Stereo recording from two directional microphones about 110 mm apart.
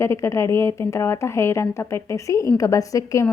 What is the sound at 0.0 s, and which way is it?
A woman's voice, 25° left (ahead or behind).